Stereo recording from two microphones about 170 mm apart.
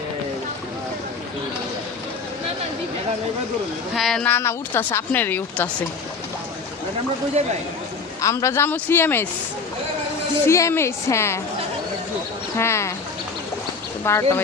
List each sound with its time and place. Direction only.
3.9 s speech: centre (ahead or behind)
8.2 s speech: 20° left (ahead or behind)
10.4 s speech: 15° left (ahead or behind)
12.5 s speech: 15° left (ahead or behind)
14.0 s speech: 15° left (ahead or behind)